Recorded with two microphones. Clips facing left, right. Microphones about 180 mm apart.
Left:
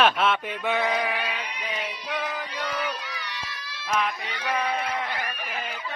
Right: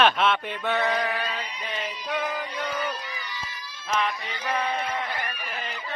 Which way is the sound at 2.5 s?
80° left.